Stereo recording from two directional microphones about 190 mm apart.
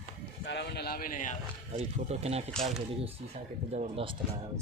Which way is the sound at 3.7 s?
35° right (ahead or behind).